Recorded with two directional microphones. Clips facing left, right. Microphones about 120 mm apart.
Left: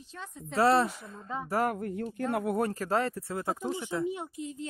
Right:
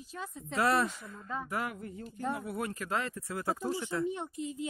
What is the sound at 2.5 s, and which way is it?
Speech, 40° left (ahead or behind).